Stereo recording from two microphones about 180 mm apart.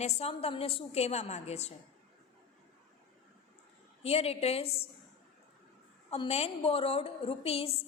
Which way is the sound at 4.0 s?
35° left (ahead or behind).